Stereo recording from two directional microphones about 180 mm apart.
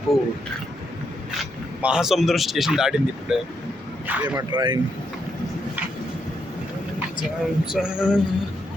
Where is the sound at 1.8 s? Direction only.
5° right (ahead or behind).